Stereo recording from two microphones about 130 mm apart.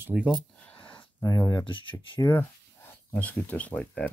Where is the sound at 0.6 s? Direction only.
10° left (ahead or behind).